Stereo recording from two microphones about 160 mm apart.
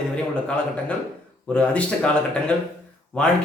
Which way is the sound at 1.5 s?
5° left (ahead or behind).